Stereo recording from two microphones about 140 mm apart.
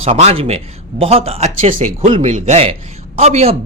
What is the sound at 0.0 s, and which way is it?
Speech, 45° right (ahead or behind).